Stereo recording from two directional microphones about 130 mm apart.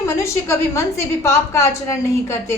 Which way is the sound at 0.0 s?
20° left (ahead or behind).